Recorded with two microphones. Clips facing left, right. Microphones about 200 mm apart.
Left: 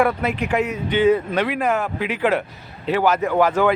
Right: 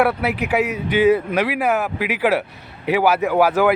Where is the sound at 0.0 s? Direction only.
5° right (ahead or behind).